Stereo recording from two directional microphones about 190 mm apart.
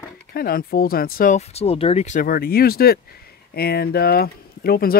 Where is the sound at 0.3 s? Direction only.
50° left (ahead or behind).